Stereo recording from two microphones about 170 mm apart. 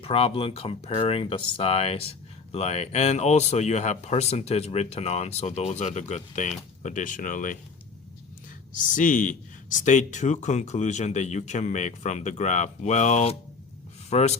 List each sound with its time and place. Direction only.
0.0 s speech: 35° left (ahead or behind); by 7.6 s 50° left (ahead or behind)
8.7 s speech: 50° left (ahead or behind)